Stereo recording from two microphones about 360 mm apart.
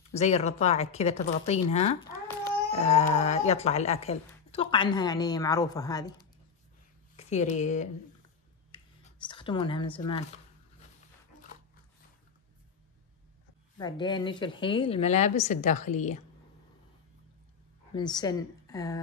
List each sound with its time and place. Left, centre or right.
0.2 s speech: centre
7.2 s speech: centre
8.7 s whispering: centre
9.3 s speech: centre
13.7 s speech: centre
17.9 s speech: centre